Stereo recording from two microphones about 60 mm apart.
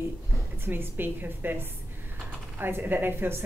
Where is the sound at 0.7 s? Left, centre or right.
Right.